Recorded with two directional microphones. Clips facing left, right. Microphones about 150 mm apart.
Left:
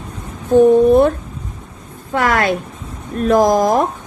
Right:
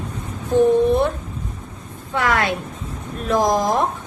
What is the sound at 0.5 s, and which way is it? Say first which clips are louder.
Speech: left 6 dB; 50° left (ahead or behind).